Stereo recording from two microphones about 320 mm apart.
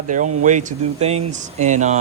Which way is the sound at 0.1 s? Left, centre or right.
Right.